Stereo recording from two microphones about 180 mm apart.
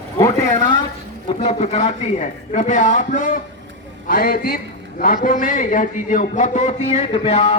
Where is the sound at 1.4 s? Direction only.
35° left (ahead or behind).